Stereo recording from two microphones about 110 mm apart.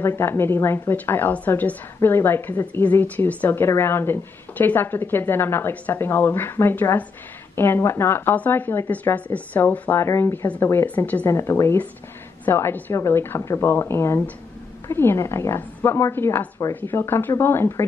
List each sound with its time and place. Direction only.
0.0 s a woman's voice: 20° left (ahead or behind)